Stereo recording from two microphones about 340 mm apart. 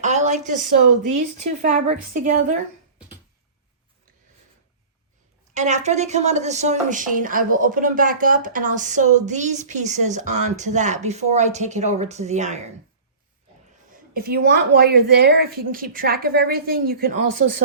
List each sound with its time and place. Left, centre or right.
0.0 s a woman's voice: right
0.8 s speech: right
1.1 s a woman's voice: right
5.5 s a woman's voice: right
13.9 s a woman's voice: right